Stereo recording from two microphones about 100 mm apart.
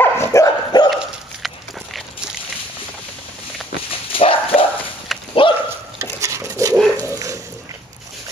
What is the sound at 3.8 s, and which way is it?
Dog, 65° left (ahead or behind).